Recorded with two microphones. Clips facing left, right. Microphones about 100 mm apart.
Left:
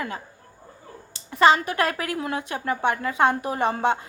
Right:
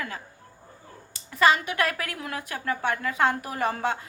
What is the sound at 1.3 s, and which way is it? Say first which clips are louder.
A woman's voice: left 4 dB; 25° left (ahead or behind).